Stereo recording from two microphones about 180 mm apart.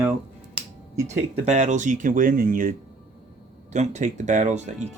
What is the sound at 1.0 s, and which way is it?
Speech, 40° right (ahead or behind).